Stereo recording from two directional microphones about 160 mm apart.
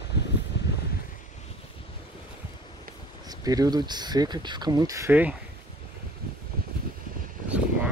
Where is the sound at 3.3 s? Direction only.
25° right (ahead or behind).